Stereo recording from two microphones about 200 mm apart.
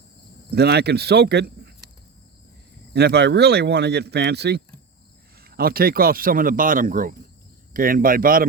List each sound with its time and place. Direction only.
0.5 s speech: 55° right (ahead or behind)
2.9 s speech: 55° right (ahead or behind)